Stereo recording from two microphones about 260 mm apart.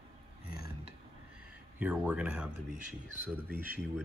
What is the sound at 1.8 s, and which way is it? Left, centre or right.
Speech, centre.